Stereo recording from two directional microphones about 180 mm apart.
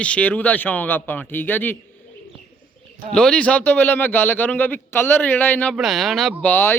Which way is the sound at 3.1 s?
5° left (ahead or behind).